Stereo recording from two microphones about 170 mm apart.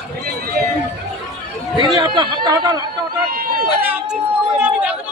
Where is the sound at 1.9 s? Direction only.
25° right (ahead or behind).